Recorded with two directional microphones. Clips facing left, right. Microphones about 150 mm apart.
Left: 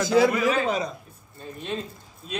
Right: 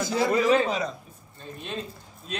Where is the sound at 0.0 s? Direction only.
90° left.